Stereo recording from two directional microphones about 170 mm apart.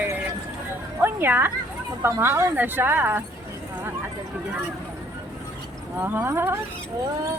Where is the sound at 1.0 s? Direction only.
10° right (ahead or behind).